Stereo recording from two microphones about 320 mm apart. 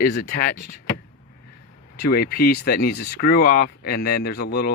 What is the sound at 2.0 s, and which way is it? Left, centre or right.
Speech, left.